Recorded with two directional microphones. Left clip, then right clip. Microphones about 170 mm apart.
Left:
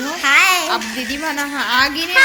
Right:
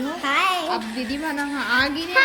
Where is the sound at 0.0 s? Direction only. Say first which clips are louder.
Left 8 dB; 20° right (ahead or behind).